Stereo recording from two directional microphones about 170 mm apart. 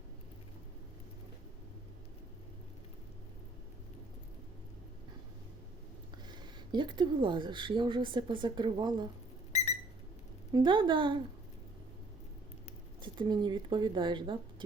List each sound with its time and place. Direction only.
6.3 s speech: 25° right (ahead or behind)
9.5 s a sound: 40° left (ahead or behind)
10.5 s speech: 25° right (ahead or behind)
13.0 s speech: 25° right (ahead or behind)